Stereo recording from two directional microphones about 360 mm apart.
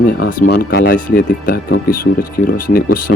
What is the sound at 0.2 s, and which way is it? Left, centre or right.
Speech, left.